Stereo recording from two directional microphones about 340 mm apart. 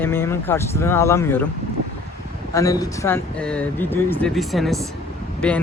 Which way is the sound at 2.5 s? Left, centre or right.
Centre.